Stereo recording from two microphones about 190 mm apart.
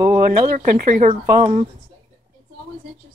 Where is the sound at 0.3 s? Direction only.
50° right (ahead or behind).